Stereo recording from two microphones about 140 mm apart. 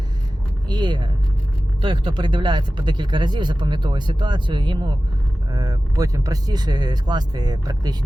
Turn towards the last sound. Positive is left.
turn(degrees=-30)  # may be behind; listen again after turning